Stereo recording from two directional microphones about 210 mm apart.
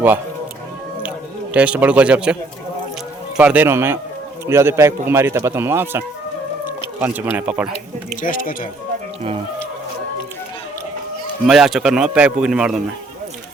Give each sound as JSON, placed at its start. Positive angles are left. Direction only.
{"t": 1.5, "sound": "speech", "side_deg": -5}
{"t": 8.2, "sound": "speech", "side_deg": 40}
{"t": 11.4, "sound": "speech", "side_deg": 0}